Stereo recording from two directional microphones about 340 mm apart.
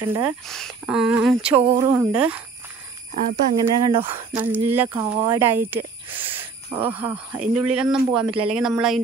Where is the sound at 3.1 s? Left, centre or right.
Centre.